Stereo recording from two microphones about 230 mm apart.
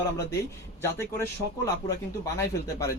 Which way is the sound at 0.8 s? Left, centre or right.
Centre.